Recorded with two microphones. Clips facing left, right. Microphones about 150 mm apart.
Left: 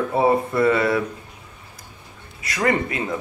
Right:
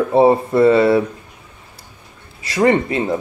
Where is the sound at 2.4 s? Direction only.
30° right (ahead or behind).